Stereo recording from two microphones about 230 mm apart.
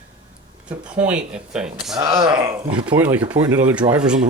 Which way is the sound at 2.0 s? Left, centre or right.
Right.